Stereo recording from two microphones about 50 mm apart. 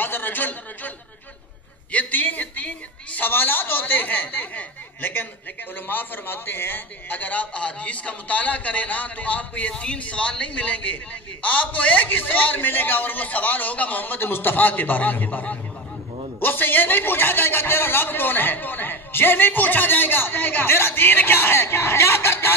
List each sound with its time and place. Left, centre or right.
0.0 s speech: left
1.9 s a sound: left
3.3 s a man's voice: left
7.1 s a man's voice: left
16.3 s a man's voice: left